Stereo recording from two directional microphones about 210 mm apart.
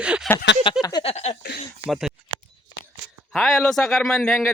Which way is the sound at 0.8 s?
25° left (ahead or behind).